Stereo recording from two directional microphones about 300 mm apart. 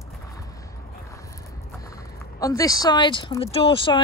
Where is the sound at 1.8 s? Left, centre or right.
Centre.